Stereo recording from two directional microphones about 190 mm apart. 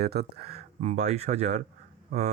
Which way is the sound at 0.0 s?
55° right (ahead or behind).